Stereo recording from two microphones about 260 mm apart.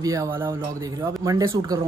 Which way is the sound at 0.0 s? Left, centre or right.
Centre.